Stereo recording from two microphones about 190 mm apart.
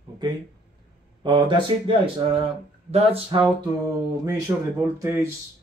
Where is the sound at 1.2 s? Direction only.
25° right (ahead or behind).